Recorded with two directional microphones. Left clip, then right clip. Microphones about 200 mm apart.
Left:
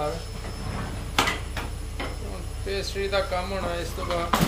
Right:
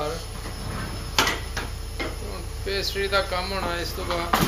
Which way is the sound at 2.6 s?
5° left (ahead or behind).